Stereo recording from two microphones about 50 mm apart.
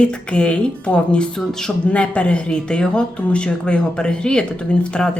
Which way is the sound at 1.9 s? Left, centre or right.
Left.